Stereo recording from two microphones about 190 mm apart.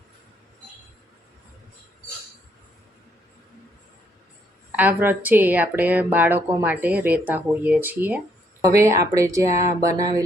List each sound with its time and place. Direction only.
4.7 s a woman's voice: 10° right (ahead or behind)